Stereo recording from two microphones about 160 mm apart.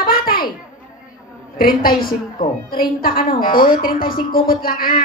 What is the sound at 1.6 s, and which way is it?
A child's voice, 65° left (ahead or behind).